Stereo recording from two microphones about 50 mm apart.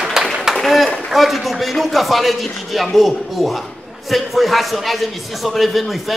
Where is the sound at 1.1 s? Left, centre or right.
Centre.